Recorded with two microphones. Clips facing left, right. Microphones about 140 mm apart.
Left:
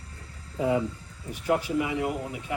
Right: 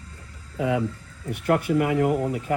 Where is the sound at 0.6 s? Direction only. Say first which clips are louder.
Right 1 dB; 90° right.